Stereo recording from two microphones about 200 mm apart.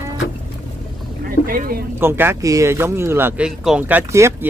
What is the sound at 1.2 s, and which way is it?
Speech, 45° right (ahead or behind).